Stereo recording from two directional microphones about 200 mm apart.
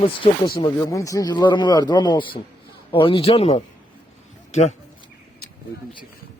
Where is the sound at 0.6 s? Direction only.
15° left (ahead or behind).